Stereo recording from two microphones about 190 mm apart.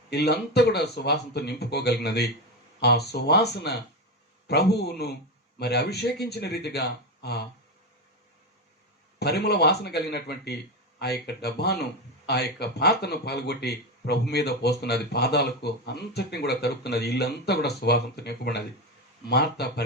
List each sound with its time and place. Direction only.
0.1 s speech: 60° left (ahead or behind)
9.1 s speech: 60° left (ahead or behind)